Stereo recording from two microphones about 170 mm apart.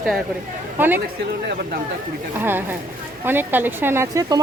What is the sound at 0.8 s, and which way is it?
Speech, 10° right (ahead or behind).